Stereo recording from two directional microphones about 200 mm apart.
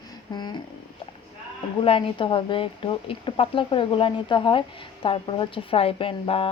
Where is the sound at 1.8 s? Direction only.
25° left (ahead or behind).